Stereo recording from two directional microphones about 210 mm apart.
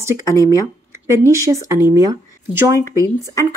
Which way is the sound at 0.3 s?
15° left (ahead or behind).